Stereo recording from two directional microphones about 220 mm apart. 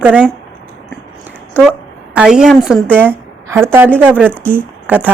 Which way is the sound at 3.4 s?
10° right (ahead or behind).